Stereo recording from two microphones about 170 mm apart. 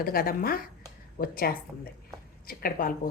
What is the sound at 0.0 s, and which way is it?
A woman's voice, 60° left (ahead or behind).